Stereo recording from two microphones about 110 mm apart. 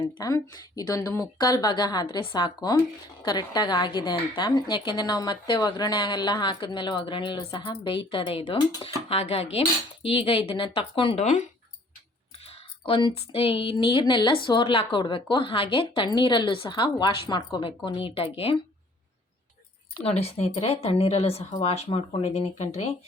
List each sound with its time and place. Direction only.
0.0 s a woman's voice: 35° left (ahead or behind); by 8.5 s 55° left (ahead or behind)
8.8 s speech: 65° left (ahead or behind)
11.2 s speech: 90° left
12.5 s a sound: 55° left (ahead or behind)
13.3 s a woman's voice: 55° left (ahead or behind)
20.0 s speech: 65° left (ahead or behind); by 23.0 s 85° left